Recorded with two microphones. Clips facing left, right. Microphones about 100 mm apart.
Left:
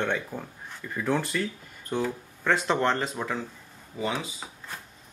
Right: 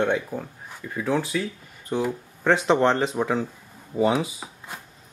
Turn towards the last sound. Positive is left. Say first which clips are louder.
# right 2 dB
turn(degrees=-5)  # may be behind; listen again after turning